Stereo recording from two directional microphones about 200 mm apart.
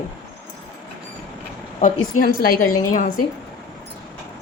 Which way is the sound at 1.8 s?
45° left (ahead or behind).